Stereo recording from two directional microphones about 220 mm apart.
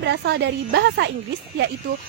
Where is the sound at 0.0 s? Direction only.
50° right (ahead or behind).